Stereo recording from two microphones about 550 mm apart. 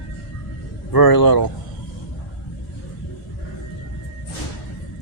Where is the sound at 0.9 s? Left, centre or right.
Left.